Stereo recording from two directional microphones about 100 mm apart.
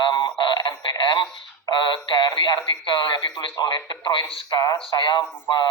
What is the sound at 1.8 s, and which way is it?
Speech, 50° left (ahead or behind).